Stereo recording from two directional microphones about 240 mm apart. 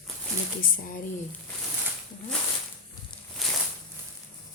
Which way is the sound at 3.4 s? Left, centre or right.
Centre.